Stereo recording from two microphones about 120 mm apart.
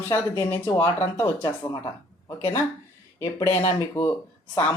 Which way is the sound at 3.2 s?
25° left (ahead or behind).